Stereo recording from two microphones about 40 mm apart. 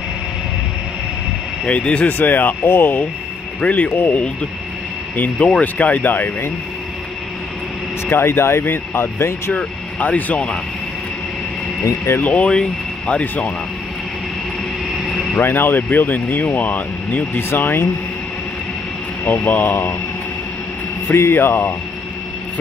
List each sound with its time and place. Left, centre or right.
1.7 s speech: left
2.0 s speech: left
2.6 s speech: left
3.6 s speech: left
5.6 s speech: left
8.1 s speech: left
9.9 s speech: left
12.2 s speech: left
12.4 s speech: left
15.4 s speech: left
19.2 s speech: left
21.1 s speech: left